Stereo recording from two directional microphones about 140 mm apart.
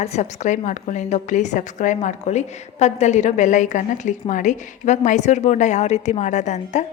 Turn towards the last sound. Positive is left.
turn(degrees=55)  # may be behind; listen again after turning